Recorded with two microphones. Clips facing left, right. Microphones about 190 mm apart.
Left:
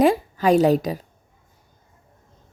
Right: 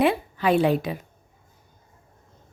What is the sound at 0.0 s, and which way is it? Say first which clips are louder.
A woman's voice: left 4 dB; 40° left (ahead or behind).